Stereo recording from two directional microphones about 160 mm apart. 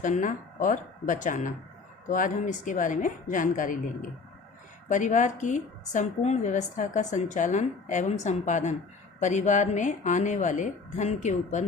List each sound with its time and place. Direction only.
0.0 s a woman's voice: 55° left (ahead or behind)
4.9 s a woman's voice: 50° left (ahead or behind)